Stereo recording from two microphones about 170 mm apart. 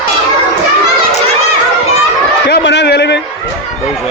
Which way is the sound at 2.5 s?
90° left.